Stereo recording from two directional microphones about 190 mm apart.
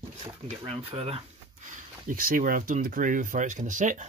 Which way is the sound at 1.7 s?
45° right (ahead or behind).